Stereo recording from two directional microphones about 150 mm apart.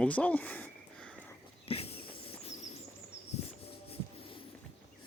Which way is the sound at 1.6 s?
40° left (ahead or behind).